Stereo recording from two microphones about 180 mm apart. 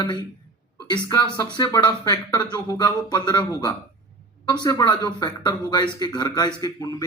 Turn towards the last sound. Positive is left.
turn(degrees=20)  # may be behind; listen again after turning